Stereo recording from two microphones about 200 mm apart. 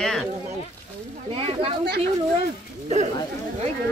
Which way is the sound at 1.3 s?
30° right (ahead or behind).